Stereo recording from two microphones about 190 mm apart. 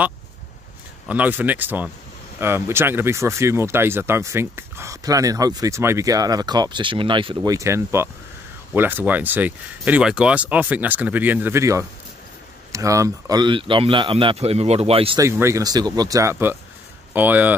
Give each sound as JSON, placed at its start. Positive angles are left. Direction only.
{"t": 1.0, "sound": "speech", "side_deg": -10}
{"t": 15.1, "sound": "speech", "side_deg": -15}